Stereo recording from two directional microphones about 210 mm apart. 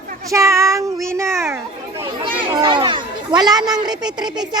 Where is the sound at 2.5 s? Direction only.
20° right (ahead or behind).